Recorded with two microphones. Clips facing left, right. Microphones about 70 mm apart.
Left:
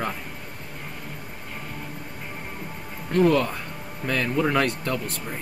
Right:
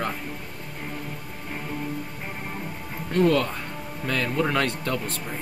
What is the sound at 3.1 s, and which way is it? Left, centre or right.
Speech, centre.